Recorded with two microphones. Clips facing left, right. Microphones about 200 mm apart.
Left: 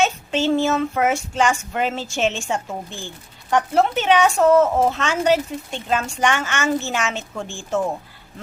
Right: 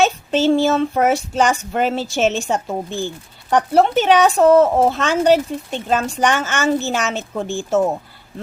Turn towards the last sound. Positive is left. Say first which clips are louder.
# right 6 dB
turn(degrees=-40)  # may be behind; listen again after turning